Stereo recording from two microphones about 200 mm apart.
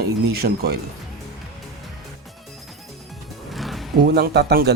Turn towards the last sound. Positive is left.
turn(degrees=-55)  # may be behind; listen again after turning